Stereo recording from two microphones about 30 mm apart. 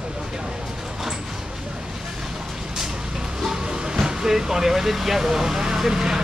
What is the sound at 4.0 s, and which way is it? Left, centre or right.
Speech, centre.